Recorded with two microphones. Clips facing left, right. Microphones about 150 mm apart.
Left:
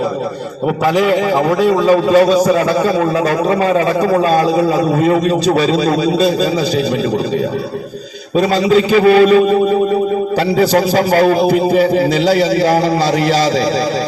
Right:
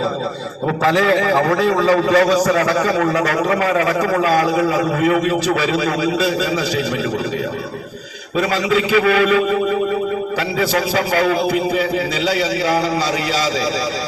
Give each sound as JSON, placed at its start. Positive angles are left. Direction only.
{"t": 0.9, "sound": "a man's voice", "side_deg": 15}
{"t": 8.4, "sound": "a man's voice", "side_deg": 35}